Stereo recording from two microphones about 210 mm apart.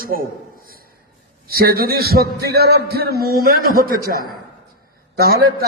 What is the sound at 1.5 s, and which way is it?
A man's voice, 45° right (ahead or behind).